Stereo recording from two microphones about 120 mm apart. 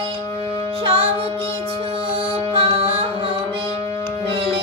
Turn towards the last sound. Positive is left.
turn(degrees=-50)  # may be behind; listen again after turning